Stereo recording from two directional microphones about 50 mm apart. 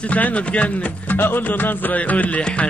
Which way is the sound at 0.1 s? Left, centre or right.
Left.